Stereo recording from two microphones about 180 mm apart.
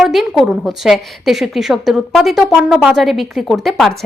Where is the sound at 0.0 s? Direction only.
Centre (ahead or behind).